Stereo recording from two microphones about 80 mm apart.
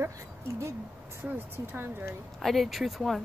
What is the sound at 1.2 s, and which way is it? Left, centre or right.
Speech, right.